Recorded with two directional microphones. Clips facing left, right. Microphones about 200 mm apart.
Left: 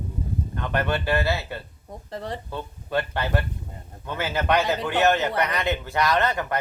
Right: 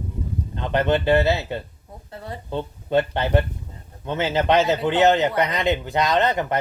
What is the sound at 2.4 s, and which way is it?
Speech, 20° right (ahead or behind).